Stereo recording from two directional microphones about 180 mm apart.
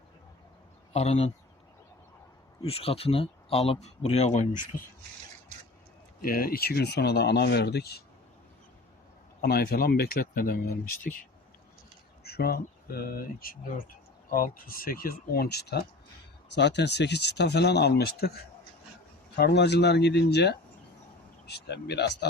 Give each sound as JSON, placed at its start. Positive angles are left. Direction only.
{"t": 0.9, "sound": "speech", "side_deg": 35}
{"t": 2.6, "sound": "speech", "side_deg": 30}
{"t": 6.2, "sound": "speech", "side_deg": 55}
{"t": 9.4, "sound": "speech", "side_deg": 60}
{"t": 12.2, "sound": "speech", "side_deg": 60}